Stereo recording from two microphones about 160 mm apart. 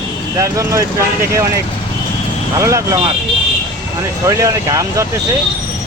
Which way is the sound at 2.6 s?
20° right (ahead or behind).